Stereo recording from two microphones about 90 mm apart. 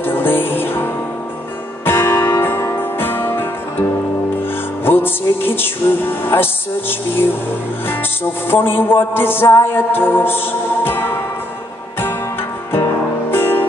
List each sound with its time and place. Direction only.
0.0 s music: 25° left (ahead or behind)
1.9 s music: 25° left (ahead or behind)
13.3 s music: 25° left (ahead or behind)